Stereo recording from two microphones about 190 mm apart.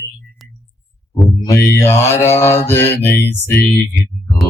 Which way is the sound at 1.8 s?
15° left (ahead or behind).